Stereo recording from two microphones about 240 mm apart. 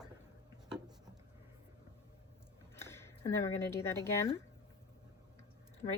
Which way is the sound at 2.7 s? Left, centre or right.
Centre.